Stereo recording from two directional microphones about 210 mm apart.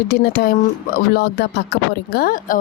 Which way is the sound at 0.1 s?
50° left (ahead or behind).